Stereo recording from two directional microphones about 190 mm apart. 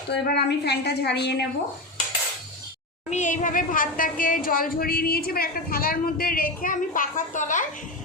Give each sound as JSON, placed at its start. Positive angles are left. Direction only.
{"t": 0.1, "sound": "a woman's voice", "side_deg": 60}
{"t": 3.1, "sound": "a woman's voice", "side_deg": 40}